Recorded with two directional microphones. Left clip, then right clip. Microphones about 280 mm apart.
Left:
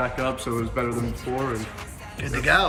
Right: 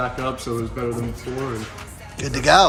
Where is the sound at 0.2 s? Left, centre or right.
Centre.